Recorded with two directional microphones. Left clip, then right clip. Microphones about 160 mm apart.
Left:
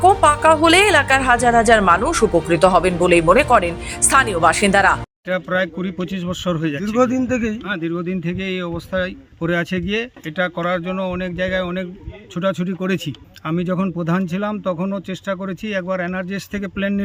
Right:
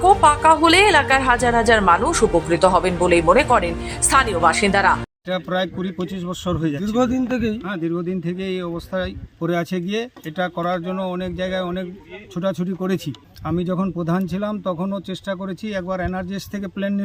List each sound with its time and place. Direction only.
0.0 s a woman's voice: 10° left (ahead or behind)
5.3 s speech: centre (ahead or behind)
6.8 s a man's voice: 25° right (ahead or behind)
7.7 s speech: 10° left (ahead or behind)